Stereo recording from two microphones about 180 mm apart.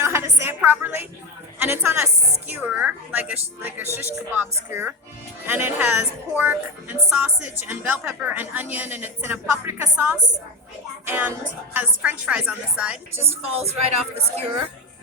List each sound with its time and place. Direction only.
0.0 s music: 15° right (ahead or behind)
1.5 s a woman's voice: 10° right (ahead or behind)
13.6 s speech: 35° right (ahead or behind)